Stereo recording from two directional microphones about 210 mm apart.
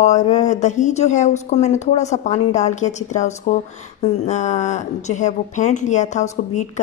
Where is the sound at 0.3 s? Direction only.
35° left (ahead or behind).